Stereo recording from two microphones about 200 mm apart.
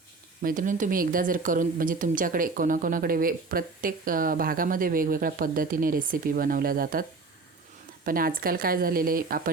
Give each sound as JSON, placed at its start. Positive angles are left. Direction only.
{"t": 0.4, "sound": "speech", "side_deg": -40}
{"t": 8.0, "sound": "speech", "side_deg": -45}